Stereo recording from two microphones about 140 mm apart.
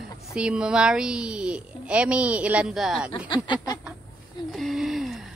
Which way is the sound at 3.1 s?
35° left (ahead or behind).